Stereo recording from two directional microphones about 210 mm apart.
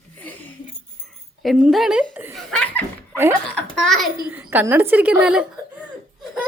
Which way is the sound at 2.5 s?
5° left (ahead or behind).